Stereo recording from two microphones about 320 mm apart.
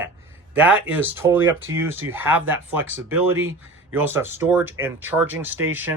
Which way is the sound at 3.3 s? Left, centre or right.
Right.